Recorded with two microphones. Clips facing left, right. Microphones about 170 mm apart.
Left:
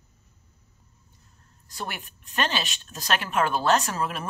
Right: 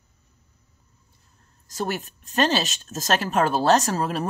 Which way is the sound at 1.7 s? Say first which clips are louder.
Right 8 dB; 40° right (ahead or behind).